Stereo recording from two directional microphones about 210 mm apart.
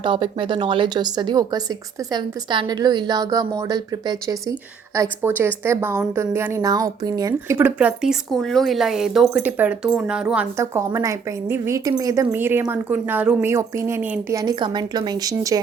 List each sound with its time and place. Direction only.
0.0 s a woman's voice: 25° right (ahead or behind)